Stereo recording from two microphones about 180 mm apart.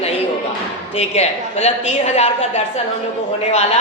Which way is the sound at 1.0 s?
35° left (ahead or behind).